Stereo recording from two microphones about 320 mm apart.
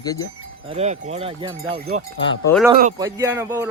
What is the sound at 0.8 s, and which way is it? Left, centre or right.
A man's voice, centre.